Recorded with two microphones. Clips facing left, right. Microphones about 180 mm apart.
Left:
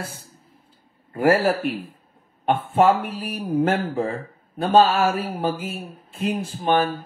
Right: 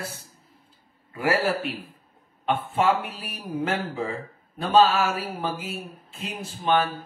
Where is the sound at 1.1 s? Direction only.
50° left (ahead or behind).